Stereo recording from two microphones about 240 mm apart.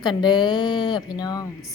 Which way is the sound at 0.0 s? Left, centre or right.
Centre.